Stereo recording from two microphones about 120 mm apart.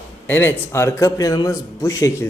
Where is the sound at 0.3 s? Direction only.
20° left (ahead or behind).